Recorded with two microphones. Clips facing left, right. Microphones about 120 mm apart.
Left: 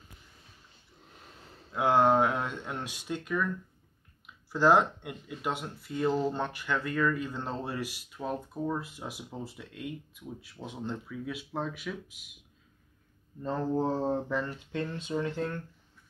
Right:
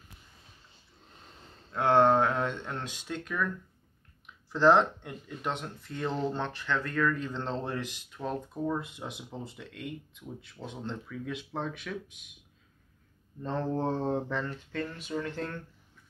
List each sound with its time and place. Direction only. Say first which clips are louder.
1.0 s a sound: left 1 dB; 5° left (ahead or behind)
4.5 s speech: right 1 dB; 10° left (ahead or behind)
13.4 s speech: left 1 dB; 10° left (ahead or behind)
14.7 s speech: left 2 dB; 20° left (ahead or behind)